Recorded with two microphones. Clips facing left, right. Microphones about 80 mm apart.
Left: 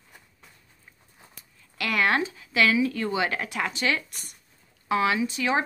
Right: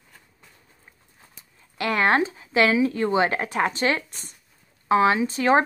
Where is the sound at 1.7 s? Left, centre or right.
Right.